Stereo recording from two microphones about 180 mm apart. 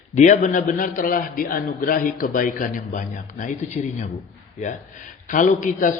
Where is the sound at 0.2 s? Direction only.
45° left (ahead or behind).